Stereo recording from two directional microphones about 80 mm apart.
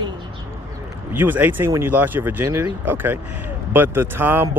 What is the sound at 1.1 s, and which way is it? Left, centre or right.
Speech, right.